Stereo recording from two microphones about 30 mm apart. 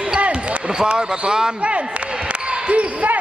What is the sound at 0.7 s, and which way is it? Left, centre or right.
Speech, right.